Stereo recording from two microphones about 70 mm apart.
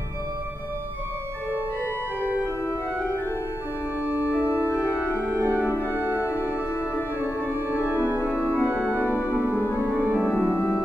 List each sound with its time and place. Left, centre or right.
4.0 s organ: right
4.4 s organ: left
5.4 s music: right
5.7 s music: left
5.9 s music: right
6.2 s music: left
7.9 s organ: right
9.0 s music: left
10.2 s organ: left